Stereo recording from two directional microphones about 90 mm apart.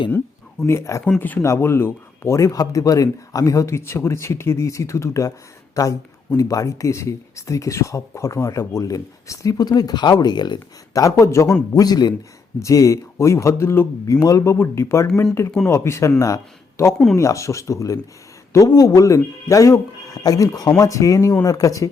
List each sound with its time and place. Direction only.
0.7 s speech: 35° left (ahead or behind)
1.2 s speech: 20° left (ahead or behind)
11.7 s speech: 45° left (ahead or behind)
12.5 s speech: 35° left (ahead or behind)